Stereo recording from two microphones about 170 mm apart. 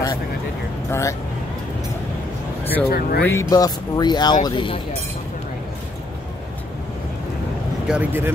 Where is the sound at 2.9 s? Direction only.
65° left (ahead or behind).